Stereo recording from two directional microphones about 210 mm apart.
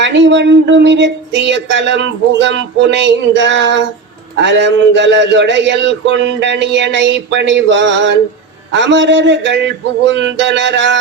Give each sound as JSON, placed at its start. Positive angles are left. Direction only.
{"t": 0.0, "sound": "speech", "side_deg": -60}